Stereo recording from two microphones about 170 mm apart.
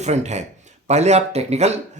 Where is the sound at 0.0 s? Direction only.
40° right (ahead or behind).